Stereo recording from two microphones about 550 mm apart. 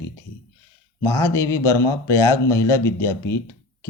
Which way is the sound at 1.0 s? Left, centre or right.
Centre.